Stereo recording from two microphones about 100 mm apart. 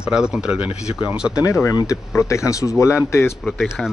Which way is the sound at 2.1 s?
30° left (ahead or behind).